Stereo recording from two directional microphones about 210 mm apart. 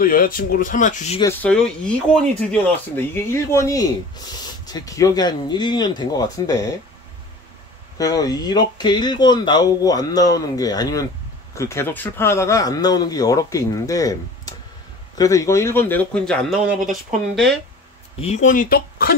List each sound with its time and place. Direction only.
0.0 s speech: 40° left (ahead or behind)
1.2 s speech: 10° left (ahead or behind)
8.0 s speech: 15° left (ahead or behind); by 17.5 s centre (ahead or behind)
18.2 s speech: 35° left (ahead or behind)